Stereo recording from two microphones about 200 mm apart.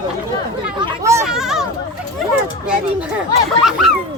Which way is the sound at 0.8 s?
15° right (ahead or behind).